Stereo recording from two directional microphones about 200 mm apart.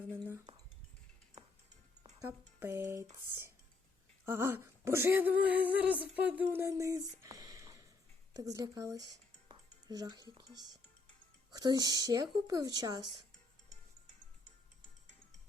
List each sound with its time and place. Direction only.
2.1 s speech: 15° right (ahead or behind)
4.3 s a sound: 10° right (ahead or behind)
9.5 s music: 20° right (ahead or behind)
10.3 s speech: 20° right (ahead or behind)